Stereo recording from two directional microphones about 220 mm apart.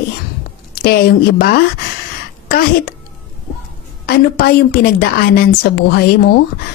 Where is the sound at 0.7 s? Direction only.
45° left (ahead or behind).